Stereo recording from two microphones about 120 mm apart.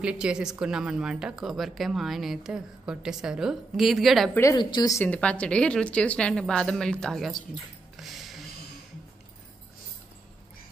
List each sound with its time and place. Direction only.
0.0 s speech: 10° right (ahead or behind)
4.6 s a woman's voice: 40° left (ahead or behind)
5.0 s a woman's voice: 10° left (ahead or behind)
8.0 s a sound: centre (ahead or behind)